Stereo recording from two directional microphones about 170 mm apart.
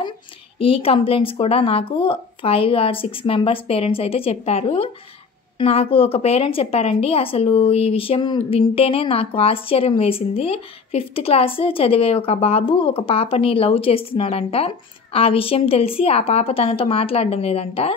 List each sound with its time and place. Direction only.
0.6 s a woman's voice: 35° left (ahead or behind)